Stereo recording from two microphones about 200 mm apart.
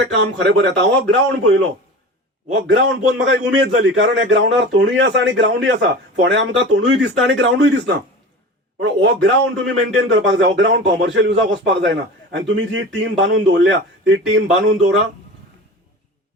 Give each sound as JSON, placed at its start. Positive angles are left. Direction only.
{"t": 0.0, "sound": "a man's voice", "side_deg": -60}